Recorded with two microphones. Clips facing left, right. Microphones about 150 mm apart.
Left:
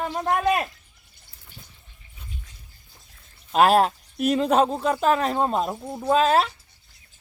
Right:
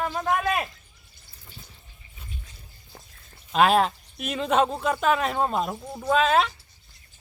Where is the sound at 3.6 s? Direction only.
40° left (ahead or behind).